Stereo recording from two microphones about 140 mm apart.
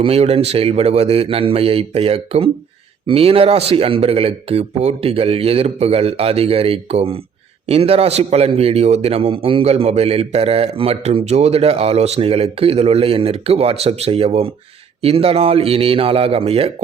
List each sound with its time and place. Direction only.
0.0 s a man's voice: 45° right (ahead or behind)